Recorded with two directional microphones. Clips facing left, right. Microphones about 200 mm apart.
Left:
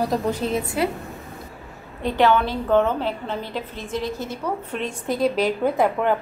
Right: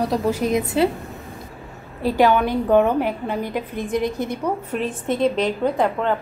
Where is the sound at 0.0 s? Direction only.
Centre (ahead or behind).